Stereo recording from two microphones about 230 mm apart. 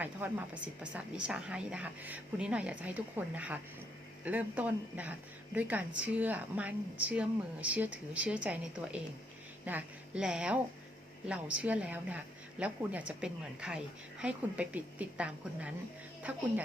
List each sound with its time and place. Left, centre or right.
0.0 s a woman's voice: centre